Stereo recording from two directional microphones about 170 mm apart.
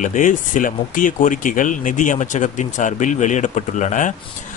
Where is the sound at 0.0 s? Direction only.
50° left (ahead or behind).